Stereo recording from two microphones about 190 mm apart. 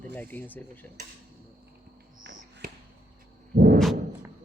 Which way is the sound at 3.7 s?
Centre (ahead or behind).